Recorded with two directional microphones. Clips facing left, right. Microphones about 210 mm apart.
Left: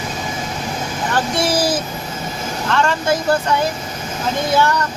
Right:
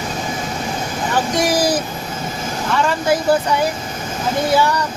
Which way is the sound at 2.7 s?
10° right (ahead or behind).